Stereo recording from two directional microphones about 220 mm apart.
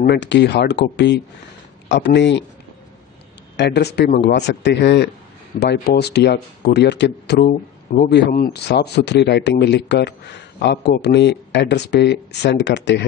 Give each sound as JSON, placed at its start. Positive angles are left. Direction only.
{"t": 0.0, "sound": "speech", "side_deg": 50}
{"t": 3.5, "sound": "speech", "side_deg": 50}